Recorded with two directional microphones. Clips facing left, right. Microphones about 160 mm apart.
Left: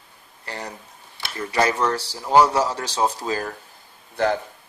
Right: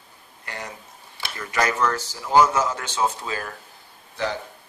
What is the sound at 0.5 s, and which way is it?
A man's voice, 35° left (ahead or behind).